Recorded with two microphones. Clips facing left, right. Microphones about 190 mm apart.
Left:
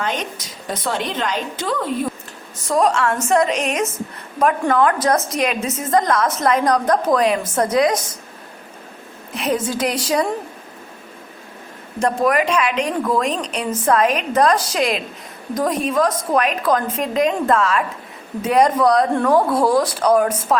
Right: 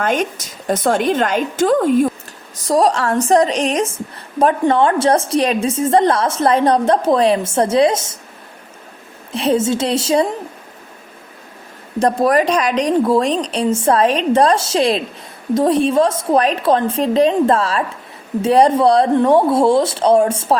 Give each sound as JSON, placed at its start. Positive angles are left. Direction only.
{"t": 0.0, "sound": "a woman's voice", "side_deg": -45}
{"t": 2.6, "sound": "a woman's voice", "side_deg": -35}
{"t": 9.3, "sound": "a woman's voice", "side_deg": -30}
{"t": 11.9, "sound": "a woman's voice", "side_deg": -35}